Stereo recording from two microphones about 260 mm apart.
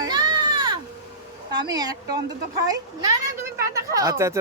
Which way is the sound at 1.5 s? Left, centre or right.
Centre.